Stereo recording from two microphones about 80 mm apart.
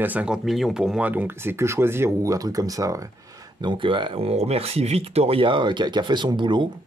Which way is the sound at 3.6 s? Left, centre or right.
Right.